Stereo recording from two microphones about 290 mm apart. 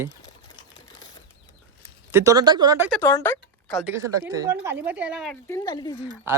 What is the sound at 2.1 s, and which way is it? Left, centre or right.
Speech, centre.